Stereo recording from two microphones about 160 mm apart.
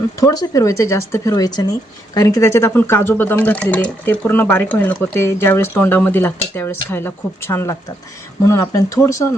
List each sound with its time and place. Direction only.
0.2 s speech: 20° left (ahead or behind)